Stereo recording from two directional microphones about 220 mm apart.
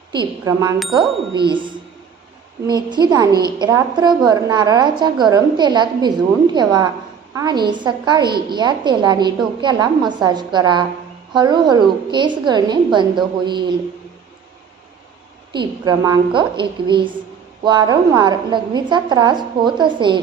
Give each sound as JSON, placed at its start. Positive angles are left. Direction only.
{"t": 0.1, "sound": "a woman's voice", "side_deg": -20}
{"t": 15.5, "sound": "a woman's voice", "side_deg": -20}